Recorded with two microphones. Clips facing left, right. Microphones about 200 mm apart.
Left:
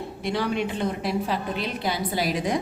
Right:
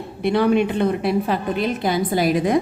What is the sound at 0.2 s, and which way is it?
A woman's voice, 60° right (ahead or behind).